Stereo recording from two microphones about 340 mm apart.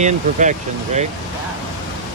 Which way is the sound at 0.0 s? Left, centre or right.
Right.